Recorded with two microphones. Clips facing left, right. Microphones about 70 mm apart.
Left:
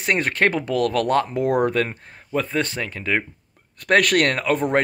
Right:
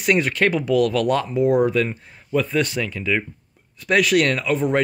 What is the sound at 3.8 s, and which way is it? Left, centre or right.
Speech, left.